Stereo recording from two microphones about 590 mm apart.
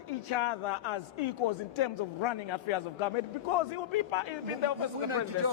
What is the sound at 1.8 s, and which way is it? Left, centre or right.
A man's voice, left.